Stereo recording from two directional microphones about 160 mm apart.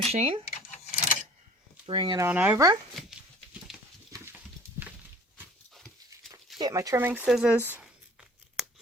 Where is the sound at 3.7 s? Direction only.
Centre (ahead or behind).